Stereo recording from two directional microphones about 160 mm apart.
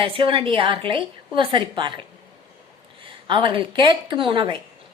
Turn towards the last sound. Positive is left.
turn(degrees=-30)  # may be behind; listen again after turning